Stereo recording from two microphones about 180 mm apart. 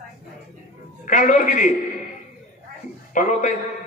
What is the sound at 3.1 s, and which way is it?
Speech, 45° left (ahead or behind).